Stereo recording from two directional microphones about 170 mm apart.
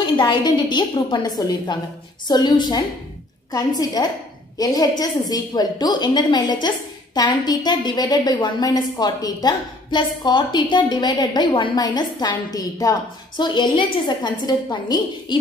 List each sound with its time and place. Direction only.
0.0 s a woman's voice: 25° left (ahead or behind)